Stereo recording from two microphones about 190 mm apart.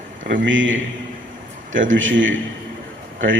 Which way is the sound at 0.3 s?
85° right.